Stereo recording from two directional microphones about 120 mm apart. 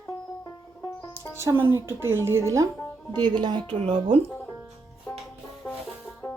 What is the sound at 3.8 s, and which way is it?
Speech, 55° right (ahead or behind).